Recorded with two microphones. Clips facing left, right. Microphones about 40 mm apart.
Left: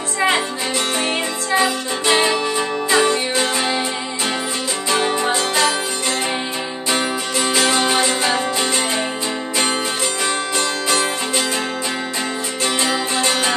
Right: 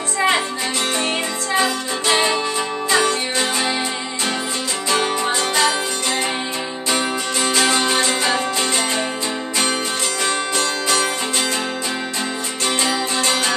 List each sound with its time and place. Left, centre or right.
1.5 s music: centre
4.8 s music: centre
6.9 s music: centre
10.5 s music: centre
12.6 s music: centre